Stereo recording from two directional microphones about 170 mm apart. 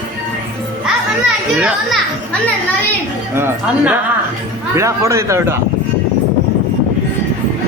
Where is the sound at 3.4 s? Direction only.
10° right (ahead or behind).